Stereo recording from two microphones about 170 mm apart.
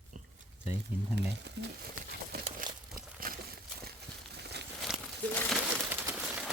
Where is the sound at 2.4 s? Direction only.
55° right (ahead or behind).